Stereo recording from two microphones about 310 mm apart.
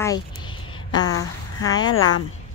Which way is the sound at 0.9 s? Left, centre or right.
Left.